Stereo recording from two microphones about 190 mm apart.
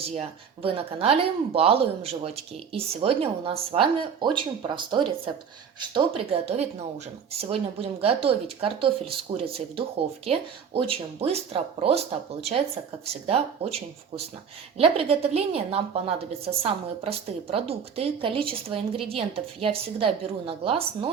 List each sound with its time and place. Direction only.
0.0 s a woman's voice: 30° right (ahead or behind)